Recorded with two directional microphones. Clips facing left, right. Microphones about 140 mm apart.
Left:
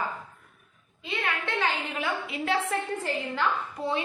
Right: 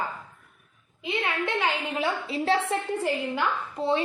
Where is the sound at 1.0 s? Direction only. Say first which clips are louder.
Right 4 dB; 15° right (ahead or behind).